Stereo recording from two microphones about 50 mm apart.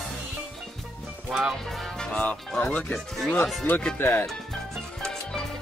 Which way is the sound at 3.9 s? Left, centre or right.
Left.